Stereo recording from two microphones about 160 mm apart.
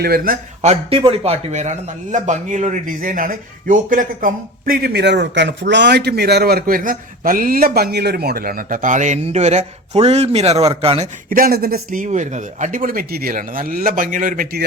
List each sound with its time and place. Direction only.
0.0 s speech: 70° right (ahead or behind)
0.6 s a man's voice: 40° right (ahead or behind)
11.3 s a man's voice: 65° right (ahead or behind)